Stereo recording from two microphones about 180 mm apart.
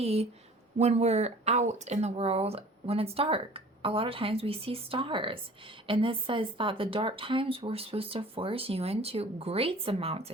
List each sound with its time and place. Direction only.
0.0 s speech: 35° right (ahead or behind)